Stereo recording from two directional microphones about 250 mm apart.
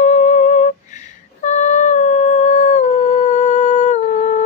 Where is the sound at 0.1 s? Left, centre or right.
Left.